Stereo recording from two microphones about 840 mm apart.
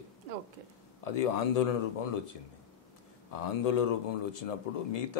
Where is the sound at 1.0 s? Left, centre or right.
Left.